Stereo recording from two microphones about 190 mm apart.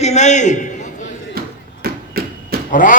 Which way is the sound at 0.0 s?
35° left (ahead or behind).